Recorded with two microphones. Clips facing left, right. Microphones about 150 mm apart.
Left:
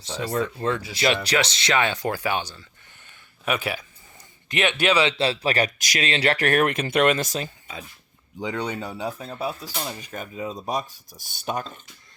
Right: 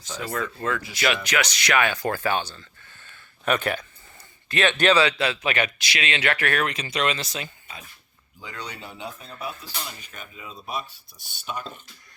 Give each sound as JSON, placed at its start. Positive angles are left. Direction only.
{"t": 0.0, "sound": "speech", "side_deg": 30}
{"t": 4.4, "sound": "speech", "side_deg": 15}
{"t": 5.0, "sound": "speech", "side_deg": 30}
{"t": 8.4, "sound": "speech", "side_deg": 75}
{"t": 8.8, "sound": "speech", "side_deg": 35}